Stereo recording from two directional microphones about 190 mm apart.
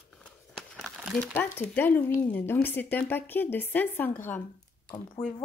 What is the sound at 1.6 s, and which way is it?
A woman's voice, 10° left (ahead or behind).